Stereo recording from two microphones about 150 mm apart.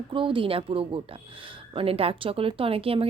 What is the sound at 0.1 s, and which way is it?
A woman's voice, 35° right (ahead or behind).